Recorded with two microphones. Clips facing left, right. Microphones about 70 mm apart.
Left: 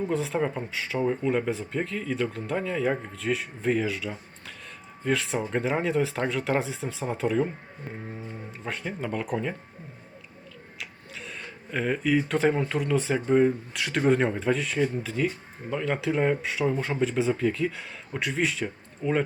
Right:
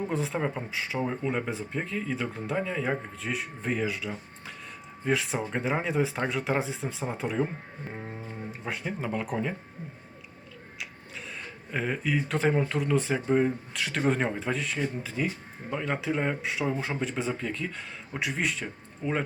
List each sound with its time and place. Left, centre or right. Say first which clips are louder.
0.1 s speech: left 3 dB; centre
8.6 s speech: left 1 dB; centre
10.8 s a sound: even; centre
12.6 s speech: left 1 dB; centre
19.0 s speech: left 4 dB; centre